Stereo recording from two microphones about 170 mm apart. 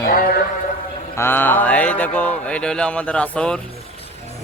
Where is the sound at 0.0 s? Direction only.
60° left (ahead or behind).